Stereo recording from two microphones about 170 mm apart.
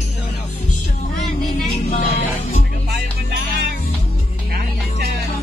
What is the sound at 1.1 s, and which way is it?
Vehicle, centre (ahead or behind).